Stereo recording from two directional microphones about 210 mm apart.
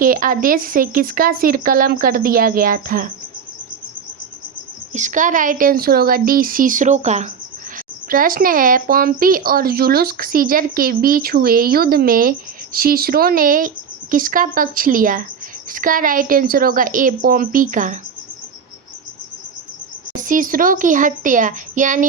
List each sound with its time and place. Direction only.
0.0 s speech: 40° right (ahead or behind)
4.9 s speech: 35° right (ahead or behind)
20.2 s speech: 40° right (ahead or behind)